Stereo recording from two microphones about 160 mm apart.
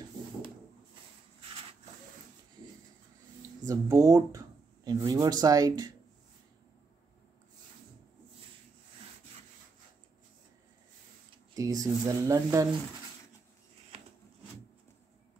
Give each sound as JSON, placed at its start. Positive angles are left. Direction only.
{"t": 3.6, "sound": "speech", "side_deg": -20}
{"t": 11.5, "sound": "speech", "side_deg": -20}